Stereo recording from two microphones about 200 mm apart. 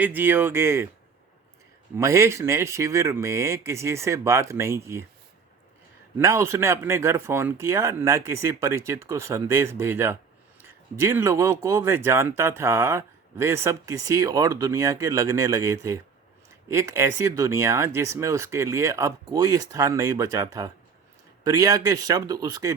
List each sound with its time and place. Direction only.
0.0 s speech: 10° right (ahead or behind)
2.0 s speech: 15° right (ahead or behind)
6.1 s speech: 15° right (ahead or behind)